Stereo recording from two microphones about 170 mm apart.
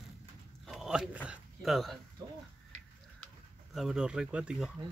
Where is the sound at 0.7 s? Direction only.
Centre (ahead or behind).